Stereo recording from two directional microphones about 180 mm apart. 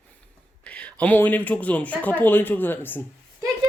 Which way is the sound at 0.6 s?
5° left (ahead or behind).